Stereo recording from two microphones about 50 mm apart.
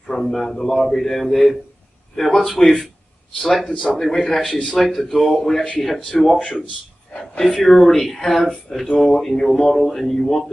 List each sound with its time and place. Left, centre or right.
0.1 s speech: centre
3.6 s a man's voice: centre
4.0 s a man's voice: centre